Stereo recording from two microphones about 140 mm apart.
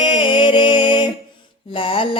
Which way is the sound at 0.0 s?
35° left (ahead or behind).